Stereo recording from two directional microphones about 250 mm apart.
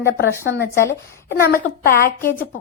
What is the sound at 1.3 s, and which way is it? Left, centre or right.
A woman's voice, left.